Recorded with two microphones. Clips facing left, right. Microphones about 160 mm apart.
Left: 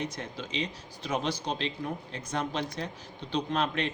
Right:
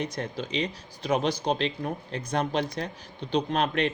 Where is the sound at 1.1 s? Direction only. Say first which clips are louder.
Right 6 dB; 70° right (ahead or behind).